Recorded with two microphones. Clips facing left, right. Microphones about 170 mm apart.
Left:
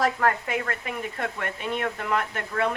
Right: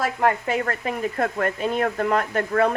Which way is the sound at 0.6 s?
40° right (ahead or behind).